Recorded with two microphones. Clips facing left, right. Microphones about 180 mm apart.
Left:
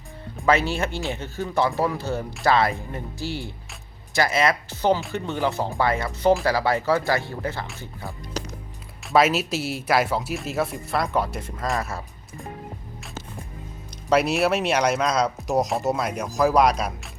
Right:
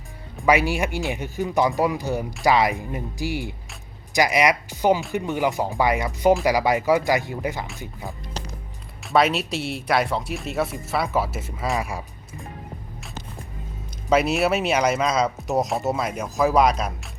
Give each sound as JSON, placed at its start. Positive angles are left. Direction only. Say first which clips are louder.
{"t": 0.4, "sound": "speech", "louder": "right 2 dB", "side_deg": -15}
{"t": 9.0, "sound": "speech", "louder": "left 1 dB", "side_deg": 0}
{"t": 14.1, "sound": "speech", "louder": "even", "side_deg": 0}